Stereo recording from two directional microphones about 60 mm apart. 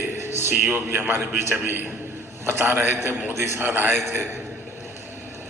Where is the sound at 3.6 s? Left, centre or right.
Right.